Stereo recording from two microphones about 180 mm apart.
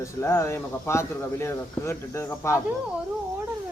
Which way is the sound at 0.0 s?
15° left (ahead or behind).